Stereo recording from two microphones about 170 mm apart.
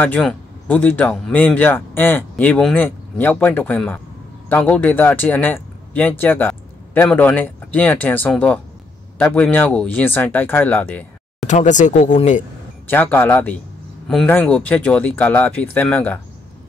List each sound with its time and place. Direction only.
0.2 s speech: 5° left (ahead or behind)
11.4 s speech: 45° left (ahead or behind)
12.8 s speech: 10° left (ahead or behind)